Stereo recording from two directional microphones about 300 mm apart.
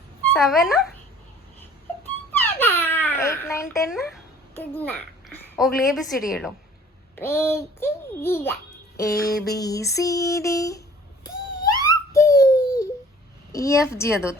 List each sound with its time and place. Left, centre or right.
0.3 s speech: centre
2.3 s babbling: centre
4.5 s a child's voice: centre
9.2 s a sound: left
9.6 s a child's voice: centre
10.0 s a sound: centre
13.5 s a child's voice: centre